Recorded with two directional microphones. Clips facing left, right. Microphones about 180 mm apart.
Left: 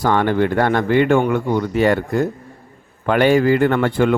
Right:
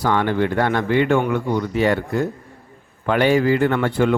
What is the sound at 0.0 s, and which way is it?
Speech, 45° left (ahead or behind).